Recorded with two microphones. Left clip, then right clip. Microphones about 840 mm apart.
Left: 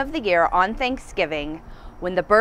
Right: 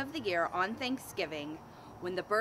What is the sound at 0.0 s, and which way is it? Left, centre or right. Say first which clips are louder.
Speech: left 14 dB; left.